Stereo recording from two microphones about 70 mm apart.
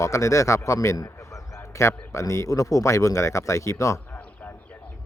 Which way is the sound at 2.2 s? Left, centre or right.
Left.